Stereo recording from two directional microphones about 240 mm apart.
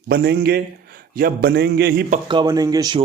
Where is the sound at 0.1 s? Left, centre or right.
Right.